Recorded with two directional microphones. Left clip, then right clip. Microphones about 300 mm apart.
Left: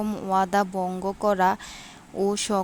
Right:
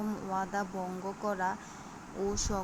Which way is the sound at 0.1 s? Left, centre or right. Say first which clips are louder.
Left 13 dB; left.